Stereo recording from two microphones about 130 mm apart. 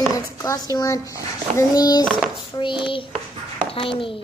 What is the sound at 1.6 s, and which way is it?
Child singing, 30° left (ahead or behind).